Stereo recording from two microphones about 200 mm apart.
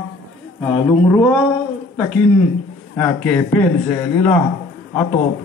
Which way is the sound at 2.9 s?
5° left (ahead or behind).